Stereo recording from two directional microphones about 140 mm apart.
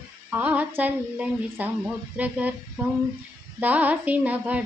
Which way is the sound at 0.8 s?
10° right (ahead or behind).